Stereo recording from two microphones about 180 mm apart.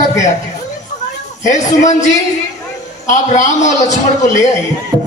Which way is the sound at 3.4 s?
40° left (ahead or behind).